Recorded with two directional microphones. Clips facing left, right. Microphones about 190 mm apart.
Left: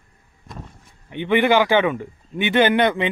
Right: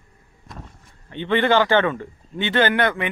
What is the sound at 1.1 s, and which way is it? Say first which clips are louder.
Speech: left 2 dB; 15° left (ahead or behind).